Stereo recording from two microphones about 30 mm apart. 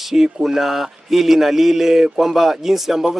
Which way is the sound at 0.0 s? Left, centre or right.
Centre.